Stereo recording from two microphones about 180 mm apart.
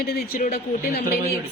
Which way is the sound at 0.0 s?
55° left (ahead or behind).